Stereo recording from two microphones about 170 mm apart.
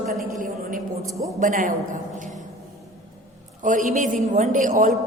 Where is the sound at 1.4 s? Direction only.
50° right (ahead or behind).